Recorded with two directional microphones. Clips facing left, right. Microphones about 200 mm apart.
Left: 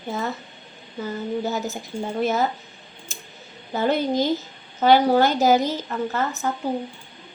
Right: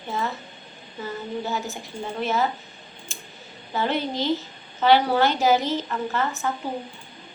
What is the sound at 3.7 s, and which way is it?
A woman's voice, 45° left (ahead or behind).